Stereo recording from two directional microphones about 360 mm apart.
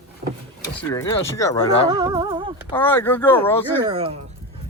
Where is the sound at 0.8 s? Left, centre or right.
Centre.